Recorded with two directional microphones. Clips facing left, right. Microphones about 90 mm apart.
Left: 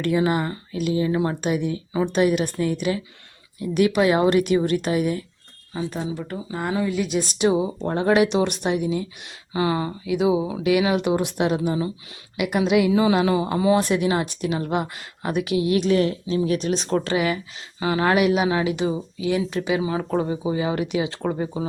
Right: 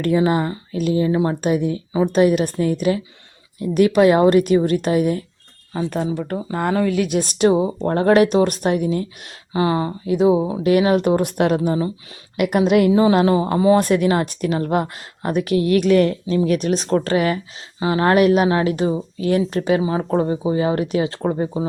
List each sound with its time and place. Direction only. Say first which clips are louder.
0.0 s speech: right 4 dB; 35° right (ahead or behind)
5.9 s a woman's voice: right 6 dB; 55° right (ahead or behind)
9.5 s a woman's voice: right 4 dB; 35° right (ahead or behind); by 12.9 s 50° right (ahead or behind)
12.9 s speech: right 4 dB; 35° right (ahead or behind)
13.8 s a woman's voice: right 4 dB; 50° right (ahead or behind)
17.7 s a woman's voice: right 4 dB; 30° right (ahead or behind); by 19.8 s 50° right (ahead or behind)
19.8 s speech: right 4 dB; 35° right (ahead or behind)
21.2 s speech: right 4 dB; 30° right (ahead or behind)